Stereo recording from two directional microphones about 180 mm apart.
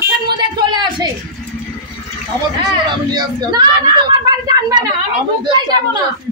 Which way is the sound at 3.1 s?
20° right (ahead or behind).